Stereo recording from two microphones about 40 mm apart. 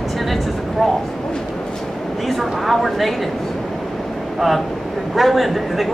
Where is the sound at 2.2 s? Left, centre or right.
Centre.